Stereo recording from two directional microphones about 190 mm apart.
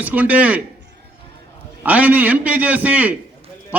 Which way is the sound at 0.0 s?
10° right (ahead or behind).